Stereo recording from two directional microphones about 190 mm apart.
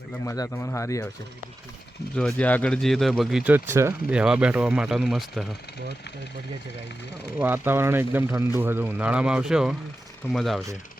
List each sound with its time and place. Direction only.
0.3 s speech: 15° left (ahead or behind)
2.1 s speech: 5° left (ahead or behind)
7.3 s speech: 10° right (ahead or behind)